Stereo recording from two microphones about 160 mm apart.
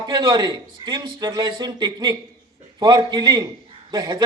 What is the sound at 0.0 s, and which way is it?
Speech, 30° right (ahead or behind).